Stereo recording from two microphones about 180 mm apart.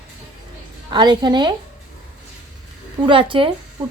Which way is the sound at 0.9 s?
25° right (ahead or behind).